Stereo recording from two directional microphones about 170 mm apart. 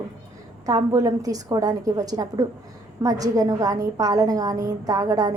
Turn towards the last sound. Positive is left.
turn(degrees=-20)  # may be behind; listen again after turning